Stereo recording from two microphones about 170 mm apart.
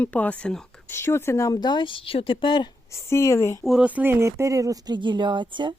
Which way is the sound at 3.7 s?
5° right (ahead or behind).